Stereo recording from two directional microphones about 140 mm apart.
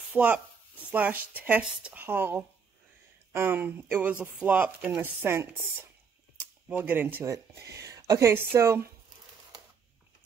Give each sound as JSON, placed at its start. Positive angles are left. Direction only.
{"t": 0.1, "sound": "speech", "side_deg": -10}